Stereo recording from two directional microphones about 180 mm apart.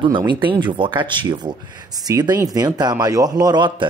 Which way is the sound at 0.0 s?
25° right (ahead or behind).